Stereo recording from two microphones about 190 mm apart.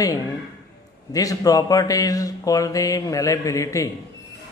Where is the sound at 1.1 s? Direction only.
20° left (ahead or behind).